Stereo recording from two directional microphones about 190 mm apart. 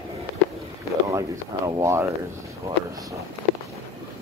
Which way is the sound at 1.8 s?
15° right (ahead or behind).